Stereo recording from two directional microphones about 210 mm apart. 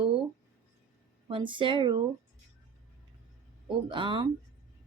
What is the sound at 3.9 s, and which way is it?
Speech, 25° right (ahead or behind).